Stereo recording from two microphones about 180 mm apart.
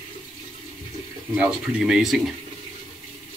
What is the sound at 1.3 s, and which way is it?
Speech, 5° right (ahead or behind).